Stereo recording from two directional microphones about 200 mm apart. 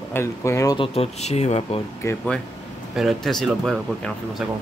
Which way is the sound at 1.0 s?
35° left (ahead or behind).